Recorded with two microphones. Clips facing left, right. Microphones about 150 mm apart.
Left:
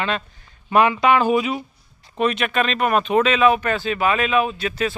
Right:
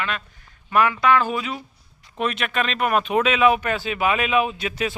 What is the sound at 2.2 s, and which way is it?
Speech, centre (ahead or behind).